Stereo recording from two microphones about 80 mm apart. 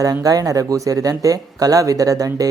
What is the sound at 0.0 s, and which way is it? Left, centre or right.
Speech, right.